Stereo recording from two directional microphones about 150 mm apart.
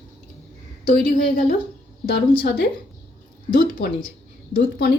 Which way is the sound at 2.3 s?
90° left.